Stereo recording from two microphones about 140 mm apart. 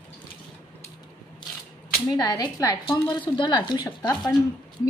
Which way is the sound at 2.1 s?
30° left (ahead or behind).